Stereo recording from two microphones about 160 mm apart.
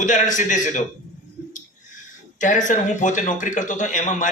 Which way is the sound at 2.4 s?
50° left (ahead or behind).